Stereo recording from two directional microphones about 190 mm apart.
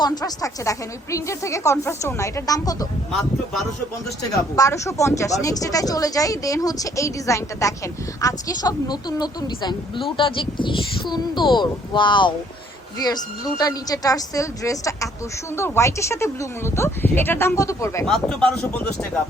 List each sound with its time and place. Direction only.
0.0 s speech: 20° left (ahead or behind)
4.2 s a woman's voice: 20° left (ahead or behind)
18.0 s speech: 5° left (ahead or behind)